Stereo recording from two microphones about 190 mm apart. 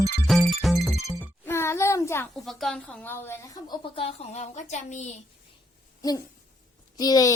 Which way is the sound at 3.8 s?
30° left (ahead or behind).